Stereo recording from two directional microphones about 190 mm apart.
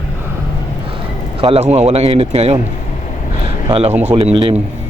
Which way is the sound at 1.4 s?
30° right (ahead or behind).